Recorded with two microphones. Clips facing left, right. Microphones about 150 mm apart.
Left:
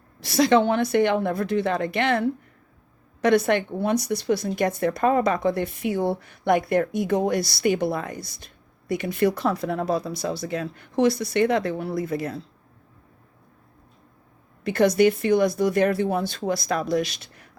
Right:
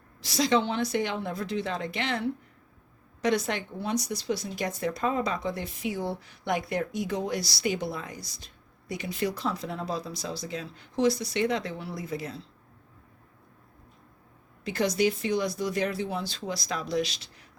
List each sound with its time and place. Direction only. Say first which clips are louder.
0.2 s speech: left 7 dB; 60° left (ahead or behind)
14.6 s speech: left 7 dB; 55° left (ahead or behind)